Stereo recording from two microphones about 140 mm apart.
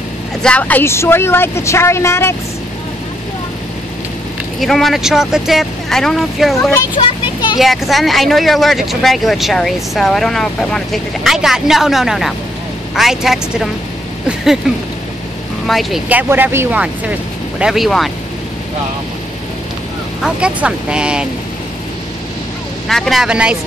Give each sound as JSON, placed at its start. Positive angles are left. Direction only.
{"t": 0.4, "sound": "speech", "side_deg": 10}
{"t": 4.6, "sound": "speech", "side_deg": 0}
{"t": 7.0, "sound": "a sound", "side_deg": 35}
{"t": 7.5, "sound": "speech", "side_deg": 0}
{"t": 15.6, "sound": "speech", "side_deg": 0}
{"t": 16.1, "sound": "speech", "side_deg": -10}
{"t": 20.2, "sound": "speech", "side_deg": -5}
{"t": 22.8, "sound": "speech", "side_deg": 0}